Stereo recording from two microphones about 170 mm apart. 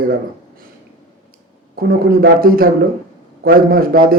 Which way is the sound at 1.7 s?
60° right (ahead or behind).